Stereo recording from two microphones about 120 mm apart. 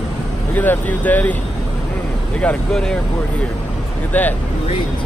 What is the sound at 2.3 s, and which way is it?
Speech, 10° left (ahead or behind).